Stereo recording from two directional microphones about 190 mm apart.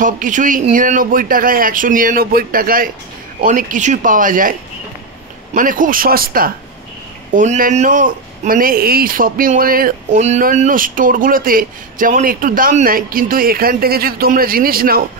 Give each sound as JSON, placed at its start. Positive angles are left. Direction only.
{"t": 0.0, "sound": "speech", "side_deg": -45}